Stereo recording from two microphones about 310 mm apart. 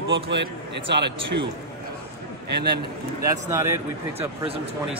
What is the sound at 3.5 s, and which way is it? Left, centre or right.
Speech, centre.